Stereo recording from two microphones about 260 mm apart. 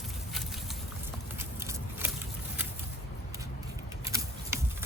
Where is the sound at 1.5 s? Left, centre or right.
Centre.